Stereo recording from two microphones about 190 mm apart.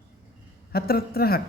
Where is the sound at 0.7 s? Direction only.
55° left (ahead or behind).